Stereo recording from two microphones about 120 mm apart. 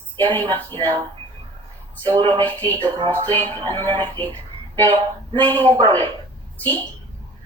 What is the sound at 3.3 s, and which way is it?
Speech, 40° right (ahead or behind).